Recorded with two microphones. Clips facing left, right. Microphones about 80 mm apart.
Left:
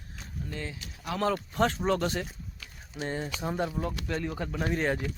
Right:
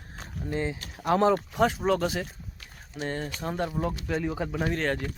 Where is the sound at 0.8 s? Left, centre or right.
Right.